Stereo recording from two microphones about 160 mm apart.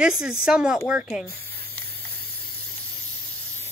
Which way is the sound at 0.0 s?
5° right (ahead or behind).